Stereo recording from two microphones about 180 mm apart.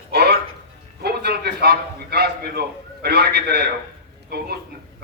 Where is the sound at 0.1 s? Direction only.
65° right (ahead or behind).